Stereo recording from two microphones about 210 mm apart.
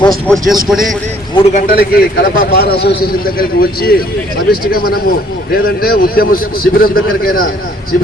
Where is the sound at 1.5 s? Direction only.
45° left (ahead or behind).